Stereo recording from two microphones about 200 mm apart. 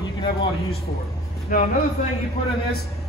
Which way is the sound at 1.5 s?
45° left (ahead or behind).